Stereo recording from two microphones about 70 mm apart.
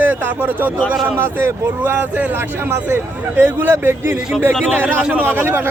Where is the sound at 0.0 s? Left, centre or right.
Right.